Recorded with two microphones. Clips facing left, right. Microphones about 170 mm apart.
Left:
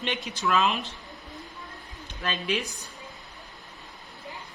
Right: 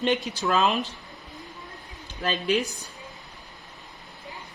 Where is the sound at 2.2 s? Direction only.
35° right (ahead or behind).